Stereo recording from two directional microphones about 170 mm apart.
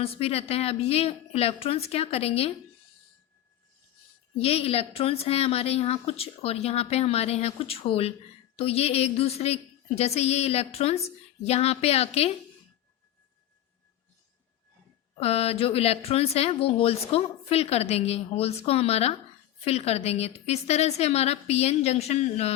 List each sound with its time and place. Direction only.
0.0 s a woman's voice: 35° left (ahead or behind)
4.4 s a woman's voice: 35° left (ahead or behind)
15.2 s a woman's voice: 35° left (ahead or behind)